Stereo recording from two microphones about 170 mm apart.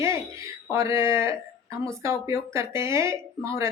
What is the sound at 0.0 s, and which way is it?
A woman's voice, 15° right (ahead or behind).